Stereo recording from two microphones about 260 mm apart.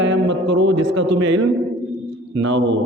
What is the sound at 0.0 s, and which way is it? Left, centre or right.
Speech, right.